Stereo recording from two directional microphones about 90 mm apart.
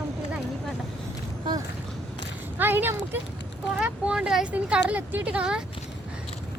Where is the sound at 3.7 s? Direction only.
10° right (ahead or behind).